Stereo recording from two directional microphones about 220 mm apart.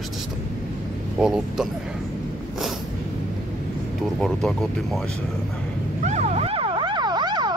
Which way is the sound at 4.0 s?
Centre (ahead or behind).